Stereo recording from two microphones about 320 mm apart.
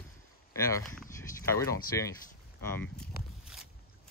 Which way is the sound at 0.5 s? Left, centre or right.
Centre.